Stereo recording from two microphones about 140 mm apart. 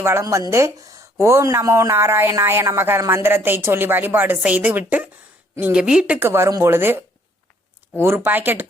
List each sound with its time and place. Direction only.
0.0 s a man's voice: 20° right (ahead or behind)
8.0 s a woman's voice: 15° right (ahead or behind)